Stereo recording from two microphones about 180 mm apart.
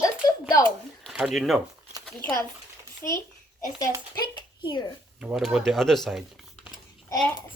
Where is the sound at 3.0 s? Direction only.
10° left (ahead or behind).